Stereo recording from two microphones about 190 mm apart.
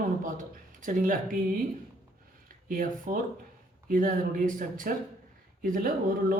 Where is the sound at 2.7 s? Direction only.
45° right (ahead or behind).